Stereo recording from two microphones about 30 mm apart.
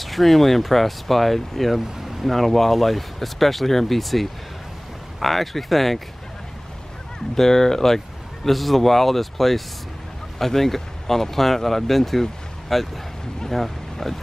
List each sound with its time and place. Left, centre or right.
0.0 s speech: centre
7.3 s speech: centre
8.5 s speech: centre